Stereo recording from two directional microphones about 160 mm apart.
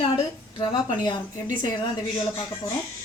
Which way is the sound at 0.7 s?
25° left (ahead or behind).